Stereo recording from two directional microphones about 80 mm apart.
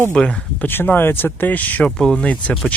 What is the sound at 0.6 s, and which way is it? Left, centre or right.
Speech, left.